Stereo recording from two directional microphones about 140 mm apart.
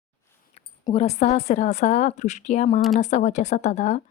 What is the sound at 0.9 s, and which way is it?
A woman's voice, 50° left (ahead or behind).